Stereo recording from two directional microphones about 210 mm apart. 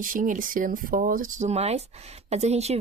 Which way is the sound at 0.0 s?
40° right (ahead or behind).